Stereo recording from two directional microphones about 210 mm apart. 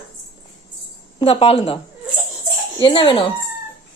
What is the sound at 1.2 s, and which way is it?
Speech, 25° left (ahead or behind).